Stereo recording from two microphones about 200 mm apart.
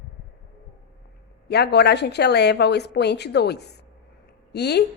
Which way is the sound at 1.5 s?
55° left (ahead or behind).